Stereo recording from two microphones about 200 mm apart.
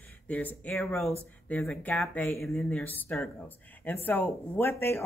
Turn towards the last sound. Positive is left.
turn(degrees=10)  # may be behind; listen again after turning